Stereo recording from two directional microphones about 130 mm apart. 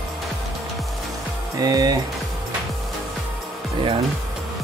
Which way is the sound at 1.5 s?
30° right (ahead or behind).